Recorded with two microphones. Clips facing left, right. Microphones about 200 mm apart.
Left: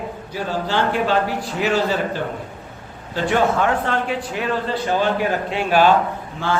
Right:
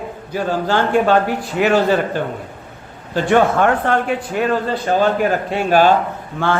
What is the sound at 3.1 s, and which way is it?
Speech, 55° right (ahead or behind).